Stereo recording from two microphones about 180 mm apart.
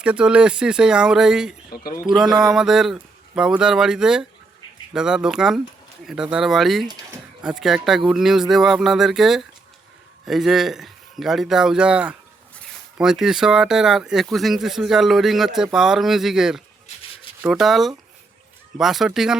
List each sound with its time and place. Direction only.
0.0 s speech: 5° right (ahead or behind)
1.7 s speech: 55° left (ahead or behind)
2.0 s speech: 5° right (ahead or behind)